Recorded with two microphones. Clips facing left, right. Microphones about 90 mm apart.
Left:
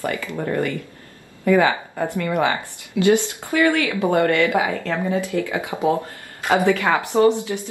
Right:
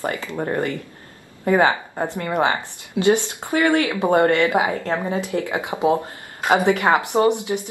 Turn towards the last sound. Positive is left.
turn(degrees=-20)  # may be behind; listen again after turning